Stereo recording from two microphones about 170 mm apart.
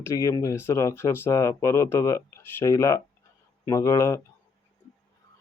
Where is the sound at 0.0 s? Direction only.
20° left (ahead or behind).